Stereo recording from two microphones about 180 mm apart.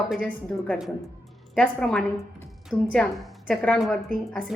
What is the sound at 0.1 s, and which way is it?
A woman's voice, 5° left (ahead or behind).